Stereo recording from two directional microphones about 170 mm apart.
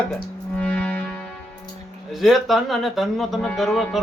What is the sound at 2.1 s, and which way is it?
Speech, centre (ahead or behind).